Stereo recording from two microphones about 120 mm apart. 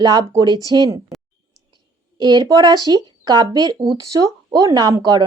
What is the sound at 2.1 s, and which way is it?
Speech, 35° right (ahead or behind).